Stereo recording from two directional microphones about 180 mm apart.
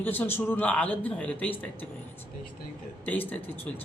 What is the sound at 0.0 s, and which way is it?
Mantra, 10° left (ahead or behind).